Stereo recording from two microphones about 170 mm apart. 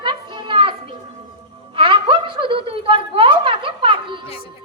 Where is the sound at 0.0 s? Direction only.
30° right (ahead or behind).